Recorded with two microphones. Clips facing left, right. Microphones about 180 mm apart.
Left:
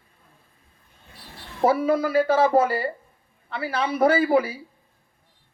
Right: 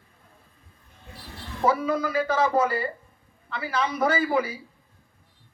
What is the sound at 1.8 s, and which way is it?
A man's voice, 30° left (ahead or behind).